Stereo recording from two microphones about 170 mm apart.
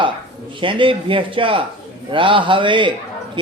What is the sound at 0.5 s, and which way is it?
A man's voice, 30° right (ahead or behind).